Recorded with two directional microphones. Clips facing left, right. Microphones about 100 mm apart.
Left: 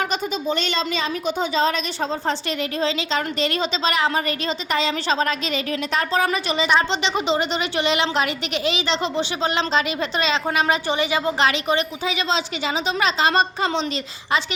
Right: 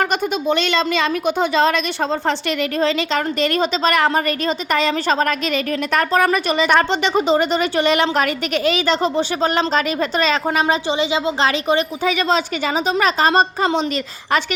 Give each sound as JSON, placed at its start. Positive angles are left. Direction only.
{"t": 0.0, "sound": "a woman's voice", "side_deg": -65}
{"t": 2.8, "sound": "a woman's voice", "side_deg": -55}
{"t": 10.8, "sound": "a woman's voice", "side_deg": -20}
{"t": 12.0, "sound": "a woman's voice", "side_deg": -50}